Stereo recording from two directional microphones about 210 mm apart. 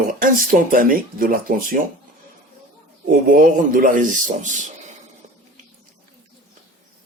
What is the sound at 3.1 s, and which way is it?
Speech, 40° right (ahead or behind).